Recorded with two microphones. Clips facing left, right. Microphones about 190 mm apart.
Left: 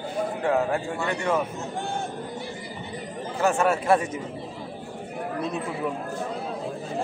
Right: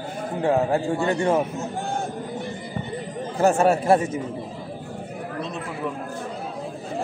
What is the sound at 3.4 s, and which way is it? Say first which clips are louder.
Speech: right 4 dB; 35° right (ahead or behind).